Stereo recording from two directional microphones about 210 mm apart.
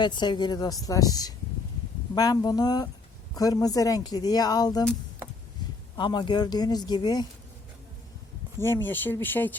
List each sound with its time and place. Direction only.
0.0 s speech: 20° left (ahead or behind)
6.0 s speech: 20° left (ahead or behind)
8.5 s speech: 10° left (ahead or behind)